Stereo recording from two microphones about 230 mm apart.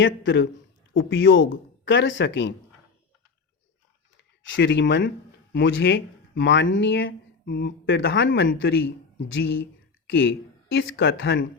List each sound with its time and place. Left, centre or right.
0.0 s speech: left
4.4 s speech: left
10.1 s speech: left